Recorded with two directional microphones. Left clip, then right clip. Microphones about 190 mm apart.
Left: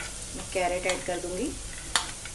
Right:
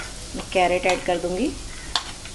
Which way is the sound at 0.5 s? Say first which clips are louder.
Right 8 dB; 45° right (ahead or behind).